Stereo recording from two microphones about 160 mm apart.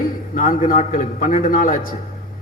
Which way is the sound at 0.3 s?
60° left (ahead or behind).